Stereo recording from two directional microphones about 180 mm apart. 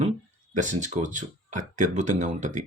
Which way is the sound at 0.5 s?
45° right (ahead or behind).